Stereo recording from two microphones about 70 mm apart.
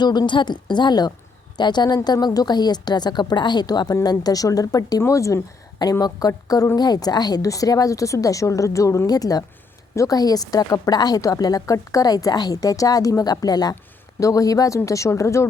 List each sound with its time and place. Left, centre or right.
0.0 s a woman's voice: left
2.2 s a woman's voice: left
5.8 s speech: left
6.7 s a woman's voice: left
7.4 s a woman's voice: left
9.0 s speech: left
9.9 s a woman's voice: left
10.2 s speech: left
14.2 s speech: left
14.8 s a woman's voice: left